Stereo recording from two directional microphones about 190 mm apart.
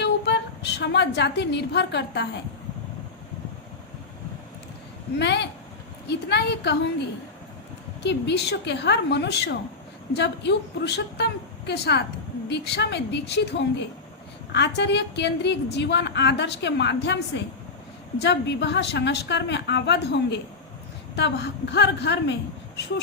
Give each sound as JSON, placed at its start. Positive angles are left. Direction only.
{"t": 0.0, "sound": "a woman's voice", "side_deg": 65}
{"t": 5.2, "sound": "a woman's voice", "side_deg": 65}
{"t": 8.0, "sound": "a woman's voice", "side_deg": 65}